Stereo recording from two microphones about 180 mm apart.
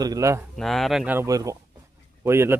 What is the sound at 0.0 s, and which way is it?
Speech, 20° right (ahead or behind).